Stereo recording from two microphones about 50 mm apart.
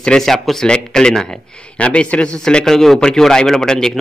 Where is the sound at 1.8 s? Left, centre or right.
Left.